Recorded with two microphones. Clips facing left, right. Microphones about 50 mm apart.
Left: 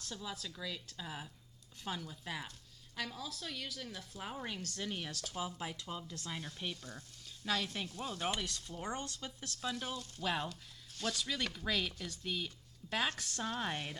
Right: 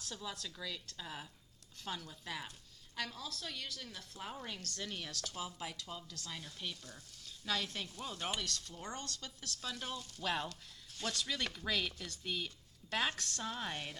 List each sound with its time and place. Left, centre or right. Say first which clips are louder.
0.0 s a woman's voice: left 1 dB; centre
7.3 s sizzle: left 2 dB; centre
8.0 s speech: left 3 dB; centre
8.4 s a woman's voice: left 1 dB; centre
9.6 s a woman's voice: left 3 dB; centre